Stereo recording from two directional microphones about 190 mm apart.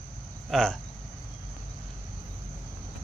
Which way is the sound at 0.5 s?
Centre (ahead or behind).